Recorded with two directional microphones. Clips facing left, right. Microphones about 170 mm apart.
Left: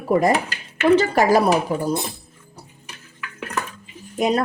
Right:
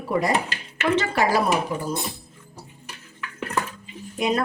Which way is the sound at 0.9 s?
40° left (ahead or behind).